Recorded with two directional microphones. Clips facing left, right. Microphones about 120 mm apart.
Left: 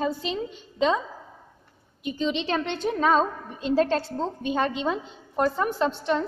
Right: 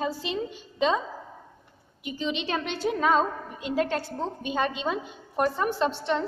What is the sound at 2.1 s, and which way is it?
A woman's voice, 15° right (ahead or behind).